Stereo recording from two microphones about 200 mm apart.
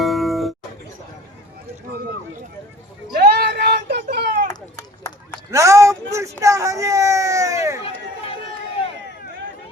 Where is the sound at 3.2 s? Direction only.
55° right (ahead or behind).